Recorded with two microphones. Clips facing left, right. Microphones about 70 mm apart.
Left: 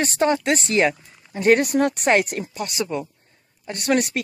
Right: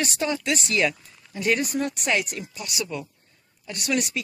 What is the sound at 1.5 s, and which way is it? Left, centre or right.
Speech, left.